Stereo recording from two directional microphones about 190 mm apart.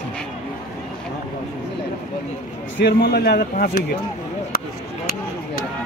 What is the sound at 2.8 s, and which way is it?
Speech, 55° left (ahead or behind).